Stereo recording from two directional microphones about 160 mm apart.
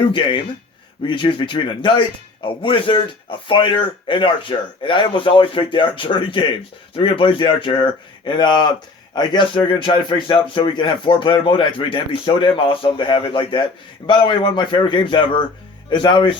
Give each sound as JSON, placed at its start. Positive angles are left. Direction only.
{"t": 0.0, "sound": "a man's voice", "side_deg": 30}